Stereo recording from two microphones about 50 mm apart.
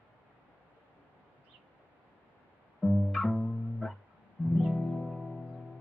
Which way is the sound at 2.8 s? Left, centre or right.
Centre.